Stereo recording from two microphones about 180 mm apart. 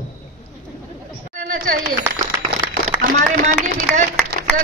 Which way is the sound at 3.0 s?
45° right (ahead or behind).